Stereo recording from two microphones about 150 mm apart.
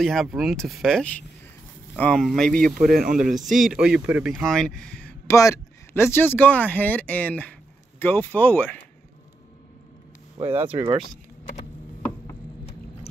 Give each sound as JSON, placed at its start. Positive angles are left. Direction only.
{"t": 0.0, "sound": "speech", "side_deg": 0}
{"t": 2.9, "sound": "speech", "side_deg": -80}
{"t": 3.3, "sound": "speech", "side_deg": 0}
{"t": 4.5, "sound": "speech", "side_deg": 5}
{"t": 5.2, "sound": "speech", "side_deg": 20}
{"t": 10.5, "sound": "speech", "side_deg": -15}